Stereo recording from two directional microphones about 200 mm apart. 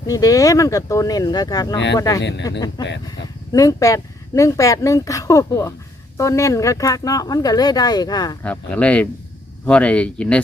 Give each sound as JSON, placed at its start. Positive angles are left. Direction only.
{"t": 0.1, "sound": "speech", "side_deg": 15}
{"t": 8.4, "sound": "speech", "side_deg": 5}